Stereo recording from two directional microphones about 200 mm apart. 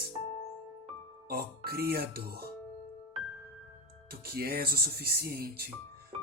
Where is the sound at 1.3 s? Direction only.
50° right (ahead or behind).